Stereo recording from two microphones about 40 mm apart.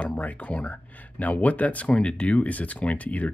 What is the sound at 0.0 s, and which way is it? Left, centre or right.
Speech, left.